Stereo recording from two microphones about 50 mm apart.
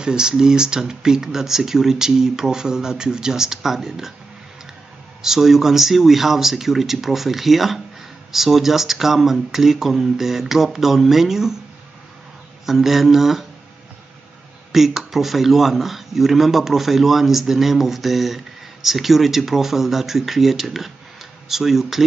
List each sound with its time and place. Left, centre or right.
0.0 s speech: centre
5.2 s speech: centre
12.6 s speech: centre
14.7 s speech: centre